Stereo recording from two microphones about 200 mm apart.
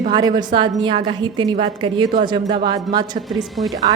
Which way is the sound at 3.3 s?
Centre (ahead or behind).